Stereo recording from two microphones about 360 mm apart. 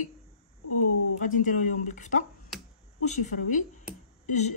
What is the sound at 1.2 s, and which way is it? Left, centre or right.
Speech, left.